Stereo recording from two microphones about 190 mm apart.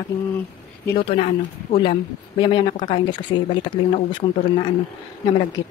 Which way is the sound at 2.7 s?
45° left (ahead or behind).